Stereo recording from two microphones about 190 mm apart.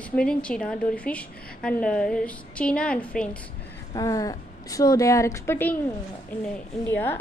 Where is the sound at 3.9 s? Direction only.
20° left (ahead or behind).